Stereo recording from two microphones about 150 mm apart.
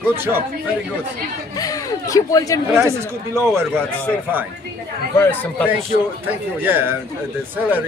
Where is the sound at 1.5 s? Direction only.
25° left (ahead or behind).